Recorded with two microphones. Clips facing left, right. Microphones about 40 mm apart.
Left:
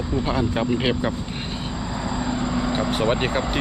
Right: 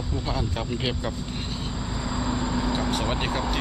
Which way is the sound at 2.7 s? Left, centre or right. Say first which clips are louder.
Left 5 dB; left.